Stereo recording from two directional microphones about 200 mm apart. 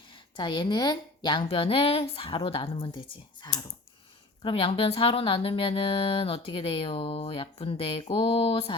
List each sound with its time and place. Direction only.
0.1 s speech: 25° left (ahead or behind)